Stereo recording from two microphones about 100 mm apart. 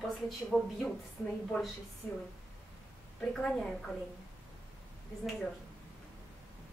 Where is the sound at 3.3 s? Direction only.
5° left (ahead or behind).